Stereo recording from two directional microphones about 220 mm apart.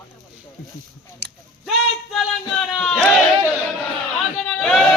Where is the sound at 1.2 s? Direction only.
50° right (ahead or behind).